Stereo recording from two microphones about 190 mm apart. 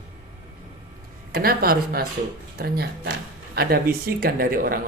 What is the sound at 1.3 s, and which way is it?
A man's voice, 50° right (ahead or behind).